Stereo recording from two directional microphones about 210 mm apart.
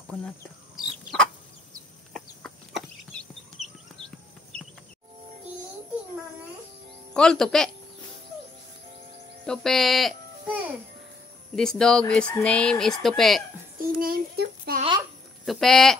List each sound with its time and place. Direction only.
0.7 s chicken: centre (ahead or behind)
7.2 s speech: 5° left (ahead or behind)
9.5 s speech: centre (ahead or behind)
13.7 s child singing: 45° right (ahead or behind)
15.4 s speech: centre (ahead or behind)